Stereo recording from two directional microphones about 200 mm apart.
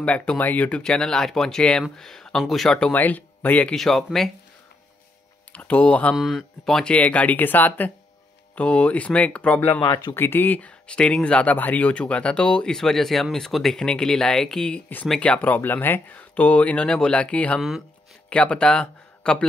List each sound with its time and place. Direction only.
0.0 s speech: 5° left (ahead or behind)
5.5 s speech: 5° left (ahead or behind)
9.8 s speech: 20° left (ahead or behind)
10.1 s speech: 10° left (ahead or behind)